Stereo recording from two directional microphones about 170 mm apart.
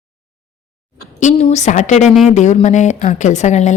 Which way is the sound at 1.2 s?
40° left (ahead or behind).